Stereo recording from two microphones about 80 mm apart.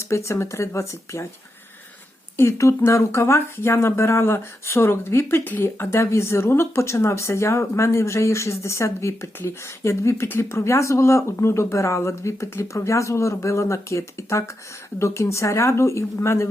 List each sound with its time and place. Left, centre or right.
0.0 s speech: left
2.4 s speech: left